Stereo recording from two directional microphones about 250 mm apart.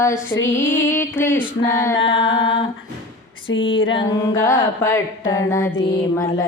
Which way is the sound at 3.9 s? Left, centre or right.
Centre.